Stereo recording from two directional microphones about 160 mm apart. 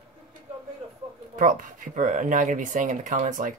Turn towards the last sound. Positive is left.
turn(degrees=-50)  # may be behind; listen again after turning